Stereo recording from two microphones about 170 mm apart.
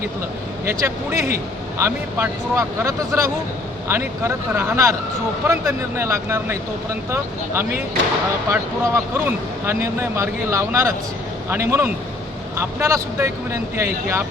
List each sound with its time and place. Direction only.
0.6 s speech: 15° right (ahead or behind)